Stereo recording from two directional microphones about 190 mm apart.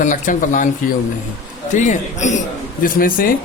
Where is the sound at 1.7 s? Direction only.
40° left (ahead or behind).